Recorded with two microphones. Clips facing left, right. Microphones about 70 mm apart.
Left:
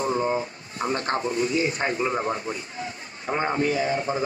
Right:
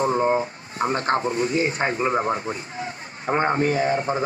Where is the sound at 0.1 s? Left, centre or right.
Right.